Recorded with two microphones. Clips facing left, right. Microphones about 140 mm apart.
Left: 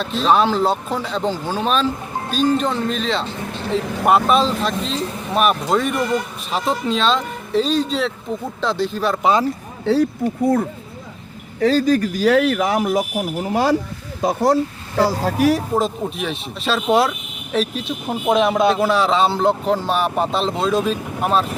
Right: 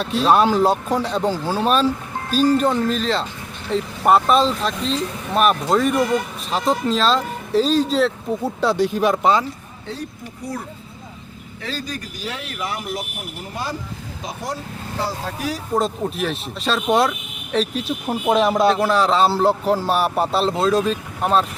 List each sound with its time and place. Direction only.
0.0 s speech: 10° right (ahead or behind)
8.6 s speech: 15° right (ahead or behind)
9.8 s speech: 75° left (ahead or behind); by 10.7 s 55° left (ahead or behind)
11.6 s a man's voice: 40° left (ahead or behind)
11.9 s speech: 75° left (ahead or behind)
15.7 s speech: centre (ahead or behind)